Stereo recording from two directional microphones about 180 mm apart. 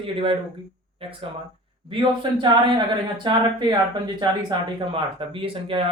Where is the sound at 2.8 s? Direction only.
25° right (ahead or behind).